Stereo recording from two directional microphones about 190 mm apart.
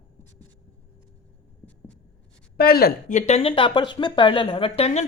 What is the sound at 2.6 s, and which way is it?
Speech, 55° left (ahead or behind).